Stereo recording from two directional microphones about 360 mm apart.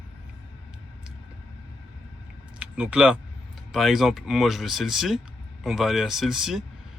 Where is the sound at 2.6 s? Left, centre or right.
Centre.